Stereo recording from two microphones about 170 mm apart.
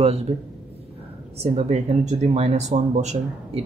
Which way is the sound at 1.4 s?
40° right (ahead or behind).